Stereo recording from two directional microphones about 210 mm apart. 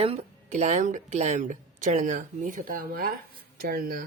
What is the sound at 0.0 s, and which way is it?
A woman's voice, 30° right (ahead or behind).